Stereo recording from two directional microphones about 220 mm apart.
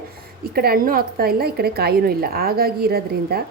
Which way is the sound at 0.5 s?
45° right (ahead or behind).